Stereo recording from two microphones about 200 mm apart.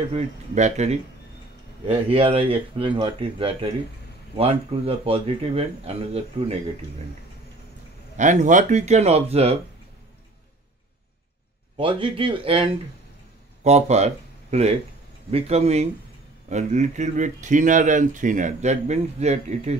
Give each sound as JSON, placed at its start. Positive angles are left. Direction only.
{"t": 0.1, "sound": "speech", "side_deg": -35}
{"t": 8.2, "sound": "speech", "side_deg": -40}
{"t": 11.7, "sound": "speech", "side_deg": -25}
{"t": 13.7, "sound": "speech", "side_deg": -35}